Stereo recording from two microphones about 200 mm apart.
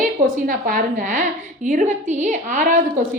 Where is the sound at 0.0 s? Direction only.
45° right (ahead or behind).